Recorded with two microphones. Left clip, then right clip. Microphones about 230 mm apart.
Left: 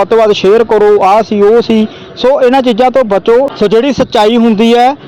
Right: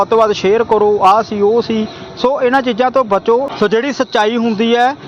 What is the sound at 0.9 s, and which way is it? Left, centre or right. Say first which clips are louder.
Speech: left 3 dB; left.